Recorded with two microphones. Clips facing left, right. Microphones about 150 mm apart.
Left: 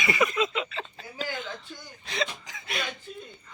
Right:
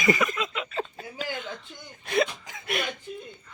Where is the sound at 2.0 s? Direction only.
50° right (ahead or behind).